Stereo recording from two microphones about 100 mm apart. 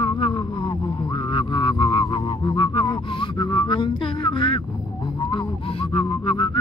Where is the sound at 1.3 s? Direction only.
55° left (ahead or behind).